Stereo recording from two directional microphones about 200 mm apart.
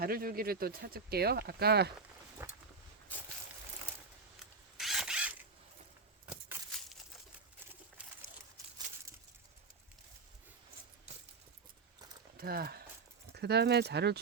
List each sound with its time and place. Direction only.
0.0 s speech: 50° right (ahead or behind)
2.4 s a sound: 10° right (ahead or behind)
4.8 s mechanisms: centre (ahead or behind)
12.4 s speech: 50° right (ahead or behind)